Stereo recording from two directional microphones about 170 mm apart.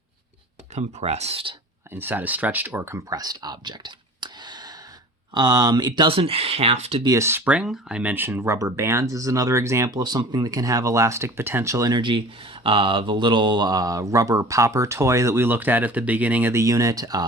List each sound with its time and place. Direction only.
0.7 s speech: 40° right (ahead or behind)
1.9 s speech: 10° right (ahead or behind); by 7.0 s 40° right (ahead or behind)
7.0 s speech: 20° right (ahead or behind)